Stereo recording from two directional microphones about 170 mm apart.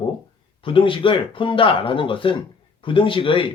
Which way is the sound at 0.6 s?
30° left (ahead or behind).